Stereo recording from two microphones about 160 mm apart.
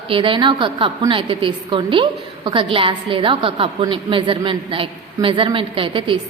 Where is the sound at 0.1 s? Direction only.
30° right (ahead or behind).